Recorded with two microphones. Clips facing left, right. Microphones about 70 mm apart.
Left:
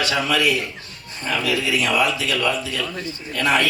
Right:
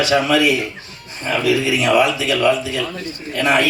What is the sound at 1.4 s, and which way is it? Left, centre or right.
A man's voice, right.